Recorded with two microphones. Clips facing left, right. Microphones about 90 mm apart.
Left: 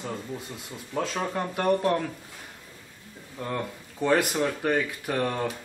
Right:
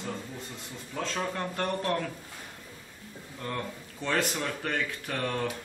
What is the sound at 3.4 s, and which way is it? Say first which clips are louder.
Speech: left 4 dB; 10° left (ahead or behind).